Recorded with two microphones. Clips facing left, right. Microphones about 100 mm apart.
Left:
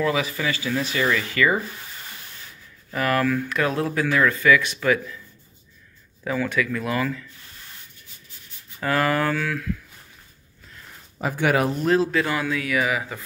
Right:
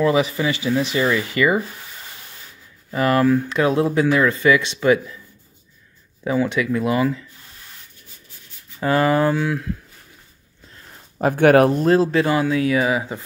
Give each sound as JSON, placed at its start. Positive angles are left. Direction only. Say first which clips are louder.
{"t": 0.0, "sound": "speech", "louder": "right 5 dB", "side_deg": -25}
{"t": 2.9, "sound": "speech", "louder": "right 5 dB", "side_deg": -25}
{"t": 6.2, "sound": "speech", "louder": "right 4 dB", "side_deg": -20}
{"t": 8.7, "sound": "speech", "louder": "right 5 dB", "side_deg": -25}
{"t": 11.1, "sound": "speech", "louder": "right 8 dB", "side_deg": -50}
{"t": 11.8, "sound": "speech", "louder": "right 4 dB", "side_deg": -35}